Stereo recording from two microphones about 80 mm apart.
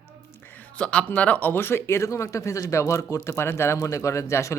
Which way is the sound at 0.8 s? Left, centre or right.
Centre.